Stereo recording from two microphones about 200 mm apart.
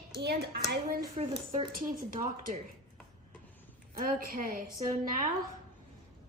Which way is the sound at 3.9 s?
45° right (ahead or behind).